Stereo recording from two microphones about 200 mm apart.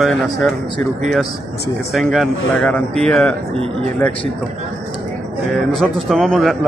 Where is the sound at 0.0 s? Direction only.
Centre (ahead or behind).